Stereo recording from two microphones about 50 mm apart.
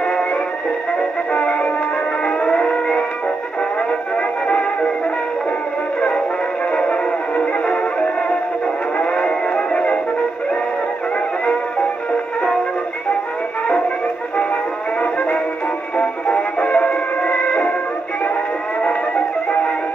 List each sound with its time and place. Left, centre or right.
0.0 s music: centre
1.3 s music: left
2.2 s civil defense siren: left
4.5 s music: left
5.9 s music: left
15.0 s music: left
18.8 s music: left